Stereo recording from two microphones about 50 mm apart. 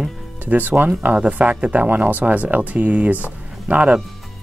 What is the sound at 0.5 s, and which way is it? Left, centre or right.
Speech, right.